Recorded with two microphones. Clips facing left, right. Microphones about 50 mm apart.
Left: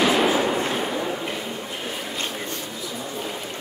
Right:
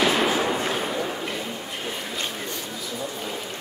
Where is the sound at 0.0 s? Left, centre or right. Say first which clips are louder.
Left 2 dB; centre.